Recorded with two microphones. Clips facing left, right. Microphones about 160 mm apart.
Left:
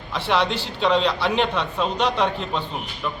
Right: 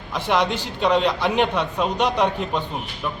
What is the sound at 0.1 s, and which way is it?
A man's voice, 10° right (ahead or behind).